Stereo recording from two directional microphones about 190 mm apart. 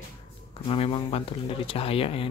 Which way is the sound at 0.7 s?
30° left (ahead or behind).